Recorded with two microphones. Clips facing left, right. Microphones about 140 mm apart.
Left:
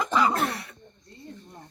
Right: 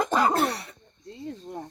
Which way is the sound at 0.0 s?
45° right (ahead or behind).